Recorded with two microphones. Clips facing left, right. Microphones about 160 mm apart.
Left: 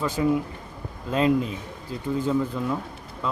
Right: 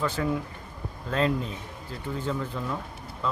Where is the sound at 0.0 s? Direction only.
15° left (ahead or behind).